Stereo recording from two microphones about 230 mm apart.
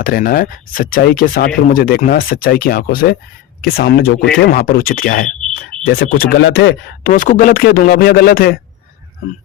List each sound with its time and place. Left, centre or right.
0.0 s speech: left